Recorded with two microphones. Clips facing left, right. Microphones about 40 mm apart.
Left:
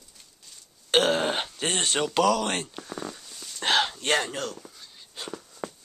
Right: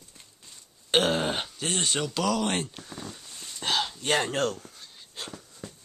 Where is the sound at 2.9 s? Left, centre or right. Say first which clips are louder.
Left 5 dB; left.